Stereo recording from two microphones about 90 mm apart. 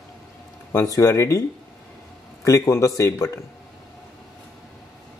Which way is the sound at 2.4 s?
35° left (ahead or behind).